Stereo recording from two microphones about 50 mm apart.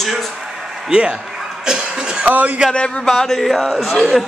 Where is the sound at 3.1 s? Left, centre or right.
Centre.